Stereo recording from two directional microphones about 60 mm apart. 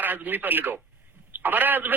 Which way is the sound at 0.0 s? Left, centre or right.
Right.